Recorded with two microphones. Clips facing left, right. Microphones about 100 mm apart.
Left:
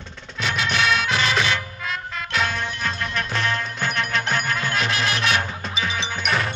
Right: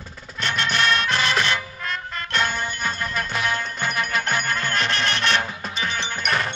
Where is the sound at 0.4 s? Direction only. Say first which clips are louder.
Even; centre (ahead or behind).